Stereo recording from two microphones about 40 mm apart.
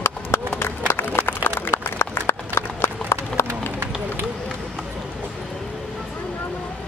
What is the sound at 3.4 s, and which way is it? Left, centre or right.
Run, left.